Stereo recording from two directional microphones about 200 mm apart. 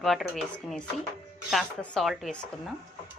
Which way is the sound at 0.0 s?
Centre (ahead or behind).